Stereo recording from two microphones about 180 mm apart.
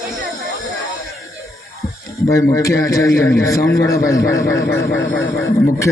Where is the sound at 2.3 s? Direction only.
15° left (ahead or behind).